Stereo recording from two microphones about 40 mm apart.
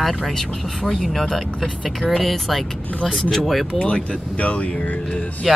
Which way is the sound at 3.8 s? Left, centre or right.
Left.